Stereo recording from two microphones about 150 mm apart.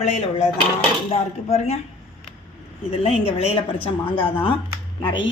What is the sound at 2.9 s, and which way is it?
Speech, 40° left (ahead or behind).